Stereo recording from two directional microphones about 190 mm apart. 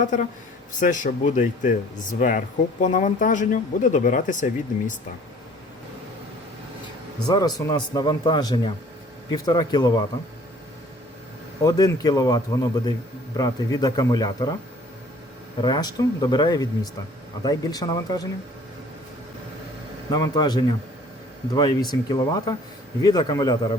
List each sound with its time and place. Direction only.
0.0 s speech: 40° left (ahead or behind)
7.3 s a man's voice: 20° left (ahead or behind)
11.6 s a man's voice: 20° left (ahead or behind)
15.6 s a man's voice: 20° left (ahead or behind)
20.1 s a man's voice: 20° left (ahead or behind)